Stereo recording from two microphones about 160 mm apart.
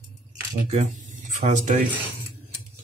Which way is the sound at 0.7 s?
45° right (ahead or behind).